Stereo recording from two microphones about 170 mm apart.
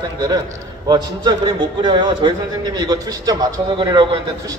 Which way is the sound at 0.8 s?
25° right (ahead or behind).